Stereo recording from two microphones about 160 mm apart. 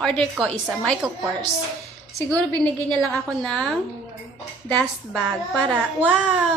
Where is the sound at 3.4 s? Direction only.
5° left (ahead or behind).